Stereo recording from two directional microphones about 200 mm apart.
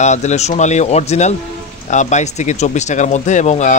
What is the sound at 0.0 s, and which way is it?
Speech, 35° left (ahead or behind).